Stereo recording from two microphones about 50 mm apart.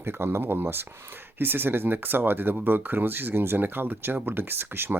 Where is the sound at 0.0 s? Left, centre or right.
Right.